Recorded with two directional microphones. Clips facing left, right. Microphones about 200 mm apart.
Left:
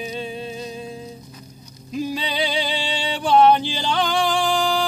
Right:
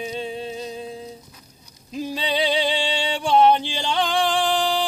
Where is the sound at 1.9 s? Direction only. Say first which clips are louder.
Even; 25° right (ahead or behind).